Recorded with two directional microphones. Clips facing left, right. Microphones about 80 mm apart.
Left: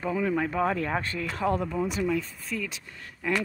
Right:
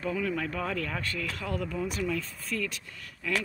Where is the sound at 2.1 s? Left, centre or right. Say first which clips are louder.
Left 3 dB; centre.